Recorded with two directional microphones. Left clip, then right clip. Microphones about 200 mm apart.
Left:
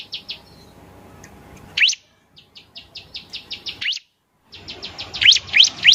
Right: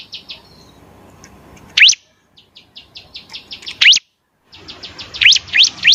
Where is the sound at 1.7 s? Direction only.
35° right (ahead or behind).